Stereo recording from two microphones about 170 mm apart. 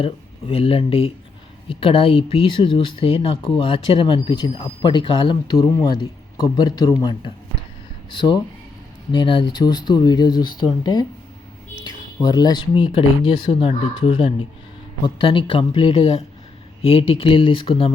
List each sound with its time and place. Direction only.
0.0 s speech: 35° left (ahead or behind)
9.1 s speech: 30° left (ahead or behind)